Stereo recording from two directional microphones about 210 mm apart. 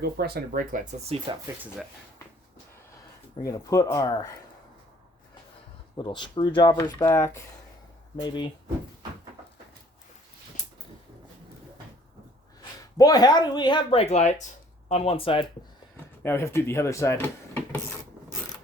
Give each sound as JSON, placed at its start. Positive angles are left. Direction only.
{"t": 0.0, "sound": "speech", "side_deg": -50}
{"t": 1.3, "sound": "speech", "side_deg": -20}
{"t": 3.4, "sound": "speech", "side_deg": 15}
{"t": 6.0, "sound": "speech", "side_deg": 20}
{"t": 13.0, "sound": "speech", "side_deg": 20}
{"t": 16.2, "sound": "speech", "side_deg": 10}